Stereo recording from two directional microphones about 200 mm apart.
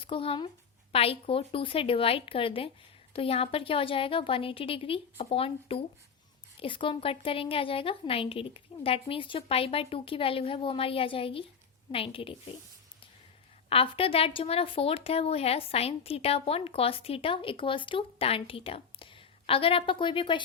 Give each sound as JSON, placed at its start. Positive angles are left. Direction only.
{"t": 0.0, "sound": "speech", "side_deg": 25}
{"t": 13.7, "sound": "speech", "side_deg": 30}